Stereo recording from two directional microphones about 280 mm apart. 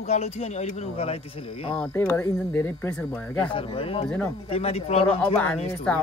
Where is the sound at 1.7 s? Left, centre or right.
Centre.